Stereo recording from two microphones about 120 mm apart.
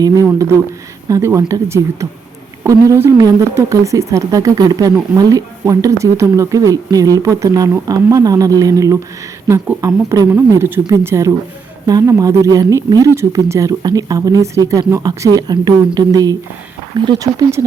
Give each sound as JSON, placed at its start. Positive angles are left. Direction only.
{"t": 0.0, "sound": "speech", "side_deg": -25}